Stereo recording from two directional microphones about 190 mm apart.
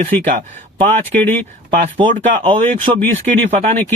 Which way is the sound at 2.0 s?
25° right (ahead or behind).